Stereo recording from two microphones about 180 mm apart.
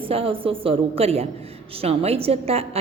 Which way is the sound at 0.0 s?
30° right (ahead or behind).